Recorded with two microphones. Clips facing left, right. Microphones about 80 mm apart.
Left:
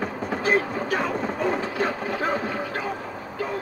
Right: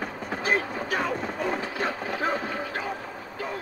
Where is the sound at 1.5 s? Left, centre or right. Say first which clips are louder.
Left 4 dB; left.